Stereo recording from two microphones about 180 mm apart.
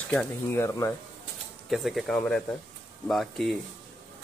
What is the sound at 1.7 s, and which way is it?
Speech, centre (ahead or behind).